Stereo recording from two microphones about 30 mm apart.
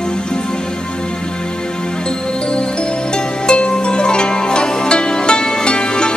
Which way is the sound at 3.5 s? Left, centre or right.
Left.